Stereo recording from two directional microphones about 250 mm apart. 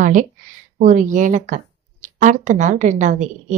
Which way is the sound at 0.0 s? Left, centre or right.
Right.